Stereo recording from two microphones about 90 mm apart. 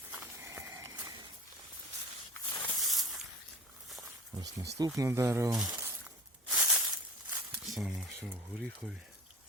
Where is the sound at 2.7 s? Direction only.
Centre (ahead or behind).